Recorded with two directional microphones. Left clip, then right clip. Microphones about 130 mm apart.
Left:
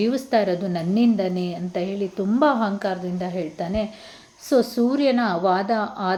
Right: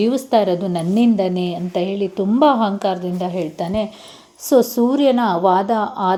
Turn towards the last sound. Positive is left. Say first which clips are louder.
# right 5 dB
turn(degrees=-15)  # may be behind; listen again after turning